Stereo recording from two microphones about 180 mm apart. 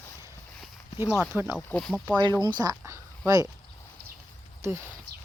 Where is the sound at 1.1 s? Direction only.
10° right (ahead or behind).